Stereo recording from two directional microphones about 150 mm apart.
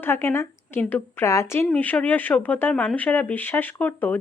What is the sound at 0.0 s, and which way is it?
A woman's voice, 15° left (ahead or behind).